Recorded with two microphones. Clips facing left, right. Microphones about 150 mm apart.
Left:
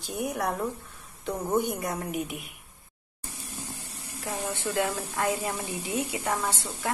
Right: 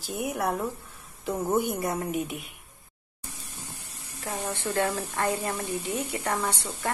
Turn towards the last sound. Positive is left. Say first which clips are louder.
# right 1 dB
turn(degrees=0)  # may be behind; listen again after turning